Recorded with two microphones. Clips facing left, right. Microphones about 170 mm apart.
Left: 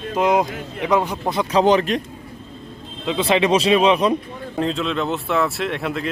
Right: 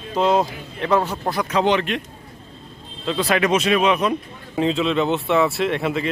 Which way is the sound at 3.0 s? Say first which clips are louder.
Left 2 dB; 20° left (ahead or behind).